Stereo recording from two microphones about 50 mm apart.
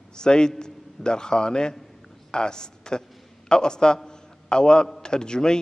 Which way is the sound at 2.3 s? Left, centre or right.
Centre.